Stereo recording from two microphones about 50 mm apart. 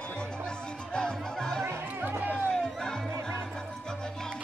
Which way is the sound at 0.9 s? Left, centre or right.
Centre.